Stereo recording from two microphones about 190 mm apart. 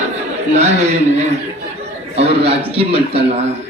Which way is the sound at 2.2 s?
30° right (ahead or behind).